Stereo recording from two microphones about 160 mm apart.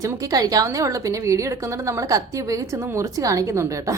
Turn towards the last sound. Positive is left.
turn(degrees=-20)  # may be behind; listen again after turning